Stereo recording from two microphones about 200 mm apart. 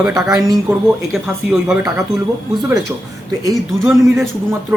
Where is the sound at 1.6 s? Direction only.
15° right (ahead or behind).